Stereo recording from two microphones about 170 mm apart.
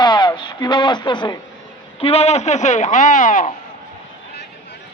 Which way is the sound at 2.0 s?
35° left (ahead or behind).